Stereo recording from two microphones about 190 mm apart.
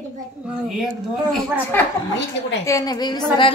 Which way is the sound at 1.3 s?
10° left (ahead or behind).